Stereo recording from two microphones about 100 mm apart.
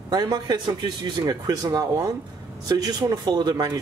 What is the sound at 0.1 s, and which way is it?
A man's voice, 40° right (ahead or behind).